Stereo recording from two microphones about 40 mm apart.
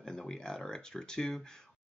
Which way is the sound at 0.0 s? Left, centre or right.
Centre.